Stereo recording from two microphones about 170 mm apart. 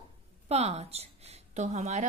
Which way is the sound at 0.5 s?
40° right (ahead or behind).